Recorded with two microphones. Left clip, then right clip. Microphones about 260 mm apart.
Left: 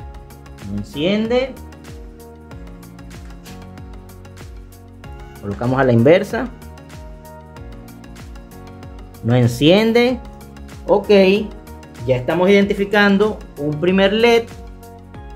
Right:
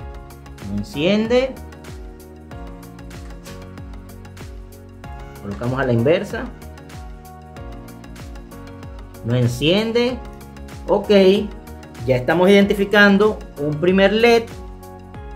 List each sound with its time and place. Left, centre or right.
0.6 s speech: centre
5.6 s speech: left
9.3 s speech: left
10.9 s speech: centre